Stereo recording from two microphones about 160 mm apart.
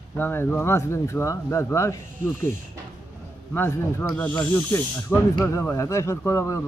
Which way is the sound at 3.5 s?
15° left (ahead or behind).